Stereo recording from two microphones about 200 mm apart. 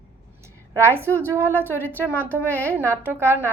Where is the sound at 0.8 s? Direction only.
10° right (ahead or behind).